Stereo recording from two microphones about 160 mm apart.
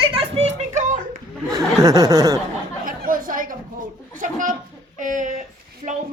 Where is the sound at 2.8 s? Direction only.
60° right (ahead or behind).